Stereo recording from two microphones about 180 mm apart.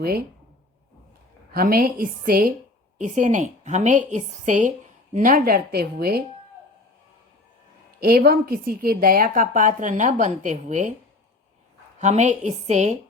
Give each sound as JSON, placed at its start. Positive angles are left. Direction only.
{"t": 1.5, "sound": "a woman's voice", "side_deg": -55}
{"t": 8.0, "sound": "a woman's voice", "side_deg": -60}
{"t": 11.9, "sound": "a woman's voice", "side_deg": -40}